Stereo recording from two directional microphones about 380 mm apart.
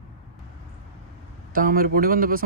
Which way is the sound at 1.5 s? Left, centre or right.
Right.